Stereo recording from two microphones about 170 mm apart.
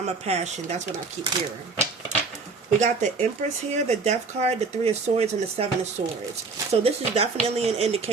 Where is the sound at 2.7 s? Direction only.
45° right (ahead or behind).